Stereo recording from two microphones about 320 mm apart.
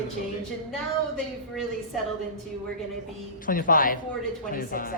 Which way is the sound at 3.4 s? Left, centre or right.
Left.